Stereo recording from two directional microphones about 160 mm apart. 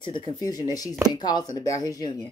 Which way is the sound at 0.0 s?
30° left (ahead or behind).